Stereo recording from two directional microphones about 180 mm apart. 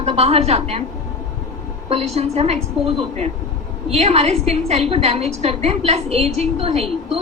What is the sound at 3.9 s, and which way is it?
A woman's voice, 35° right (ahead or behind).